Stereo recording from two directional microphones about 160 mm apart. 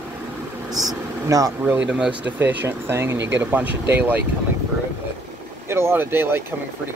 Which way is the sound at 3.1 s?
90° right.